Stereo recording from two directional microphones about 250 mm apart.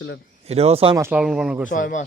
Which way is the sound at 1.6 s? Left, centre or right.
Left.